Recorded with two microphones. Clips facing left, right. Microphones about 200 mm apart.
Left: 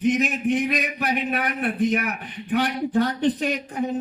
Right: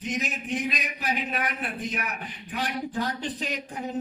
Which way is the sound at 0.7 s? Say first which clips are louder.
Left 6 dB; 65° left (ahead or behind).